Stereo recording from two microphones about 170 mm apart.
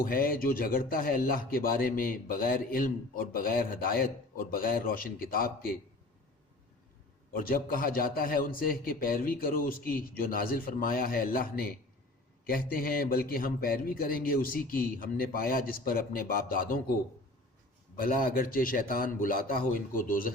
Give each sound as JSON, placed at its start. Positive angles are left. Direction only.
{"t": 0.0, "sound": "speech", "side_deg": 60}
{"t": 7.3, "sound": "speech", "side_deg": 60}
{"t": 18.0, "sound": "speech", "side_deg": 60}